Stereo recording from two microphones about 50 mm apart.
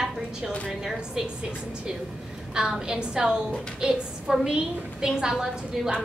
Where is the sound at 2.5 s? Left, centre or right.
Centre.